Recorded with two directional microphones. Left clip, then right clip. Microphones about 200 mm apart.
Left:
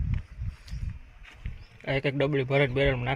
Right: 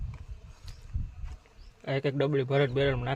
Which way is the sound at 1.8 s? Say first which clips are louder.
Left 2 dB; centre (ahead or behind).